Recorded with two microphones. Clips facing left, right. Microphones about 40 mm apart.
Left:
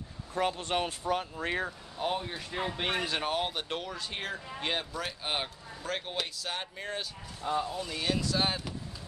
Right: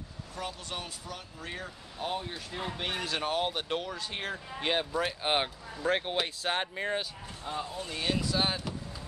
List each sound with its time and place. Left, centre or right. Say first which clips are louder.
0.3 s speech: left 8 dB; left
2.0 s speech: left 2 dB; centre
5.2 s speech: right 5 dB; right
7.4 s speech: left 6 dB; centre
8.0 s speech: right 1 dB; centre